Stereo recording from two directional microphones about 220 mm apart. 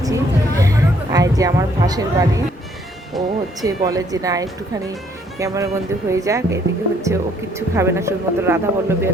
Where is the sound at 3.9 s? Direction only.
15° right (ahead or behind).